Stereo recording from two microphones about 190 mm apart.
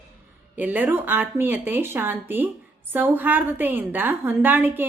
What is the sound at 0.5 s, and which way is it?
A woman's voice, 10° right (ahead or behind).